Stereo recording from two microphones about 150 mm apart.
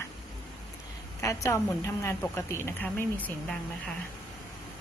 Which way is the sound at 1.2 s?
20° left (ahead or behind).